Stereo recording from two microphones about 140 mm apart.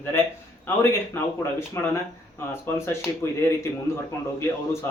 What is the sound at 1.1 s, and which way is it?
Speech, 15° left (ahead or behind).